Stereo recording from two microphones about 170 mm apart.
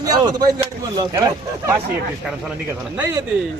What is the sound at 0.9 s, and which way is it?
Speech, 20° right (ahead or behind).